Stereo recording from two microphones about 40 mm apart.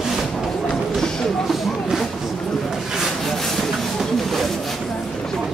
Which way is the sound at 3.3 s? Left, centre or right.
Centre.